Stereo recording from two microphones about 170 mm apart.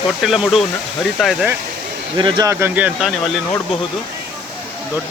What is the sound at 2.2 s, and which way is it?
Speech, 25° right (ahead or behind).